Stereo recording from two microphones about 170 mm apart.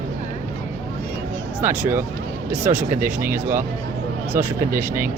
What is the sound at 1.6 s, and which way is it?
Speech, 15° right (ahead or behind).